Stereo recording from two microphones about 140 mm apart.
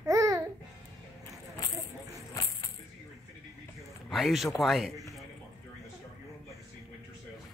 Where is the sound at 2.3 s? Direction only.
25° left (ahead or behind).